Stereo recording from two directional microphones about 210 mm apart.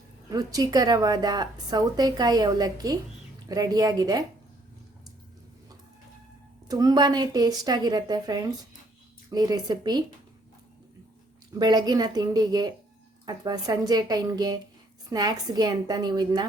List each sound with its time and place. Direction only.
0.3 s a woman's voice: 15° right (ahead or behind)
6.7 s a woman's voice: 20° right (ahead or behind)
11.6 s a woman's voice: 20° right (ahead or behind)